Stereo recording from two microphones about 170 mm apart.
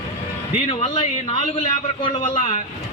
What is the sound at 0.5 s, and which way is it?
Speech, 35° left (ahead or behind).